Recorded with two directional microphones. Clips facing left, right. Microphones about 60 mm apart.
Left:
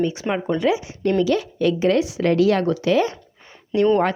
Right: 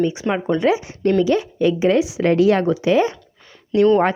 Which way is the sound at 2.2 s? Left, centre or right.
Right.